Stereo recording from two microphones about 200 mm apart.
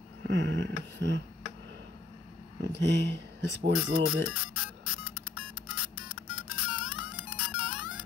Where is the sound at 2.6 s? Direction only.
60° right (ahead or behind).